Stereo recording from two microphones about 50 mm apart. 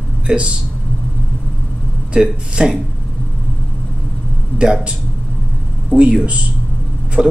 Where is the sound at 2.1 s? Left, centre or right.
Centre.